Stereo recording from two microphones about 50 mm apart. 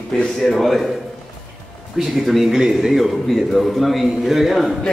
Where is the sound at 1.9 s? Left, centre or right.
Centre.